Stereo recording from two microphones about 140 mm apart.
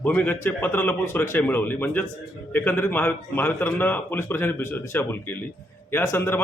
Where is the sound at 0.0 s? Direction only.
15° left (ahead or behind).